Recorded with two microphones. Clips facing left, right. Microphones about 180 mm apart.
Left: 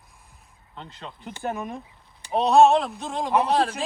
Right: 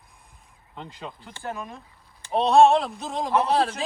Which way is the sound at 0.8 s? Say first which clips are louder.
Right 2 dB; 5° right (ahead or behind).